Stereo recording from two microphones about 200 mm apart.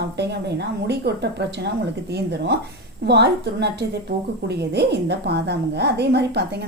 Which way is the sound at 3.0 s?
55° right (ahead or behind).